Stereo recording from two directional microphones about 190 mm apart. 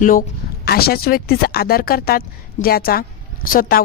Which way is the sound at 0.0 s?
45° left (ahead or behind).